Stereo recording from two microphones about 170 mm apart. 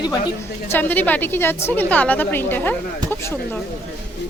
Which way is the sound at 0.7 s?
10° left (ahead or behind).